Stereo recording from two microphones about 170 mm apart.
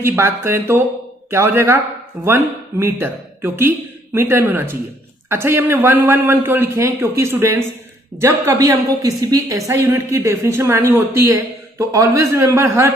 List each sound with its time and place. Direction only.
0.0 s a woman's voice: 15° right (ahead or behind)